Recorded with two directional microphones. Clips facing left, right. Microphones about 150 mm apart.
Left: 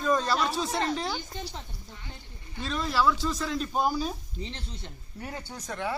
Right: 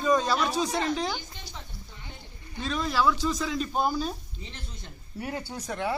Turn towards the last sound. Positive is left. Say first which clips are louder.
# right 2 dB
turn(degrees=-15)  # may be behind; listen again after turning